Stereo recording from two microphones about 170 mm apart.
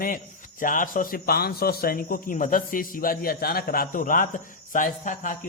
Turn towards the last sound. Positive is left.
turn(degrees=50)  # may be behind; listen again after turning